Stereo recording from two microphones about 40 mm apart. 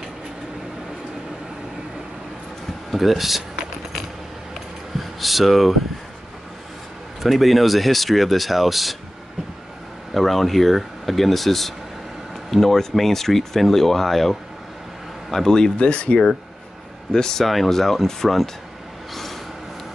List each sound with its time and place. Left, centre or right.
2.9 s speech: centre
4.9 s speech: centre
7.2 s speech: centre
10.1 s speech: centre
15.8 s speech: left
17.1 s speech: centre
17.5 s speech: centre